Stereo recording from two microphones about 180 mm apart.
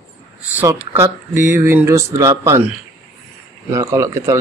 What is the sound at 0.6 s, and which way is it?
Speech, 10° right (ahead or behind).